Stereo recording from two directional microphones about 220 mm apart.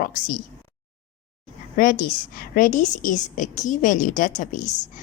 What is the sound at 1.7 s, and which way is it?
A woman's voice, 40° left (ahead or behind).